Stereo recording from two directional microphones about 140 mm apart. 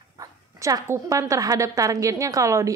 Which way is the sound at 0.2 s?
25° right (ahead or behind).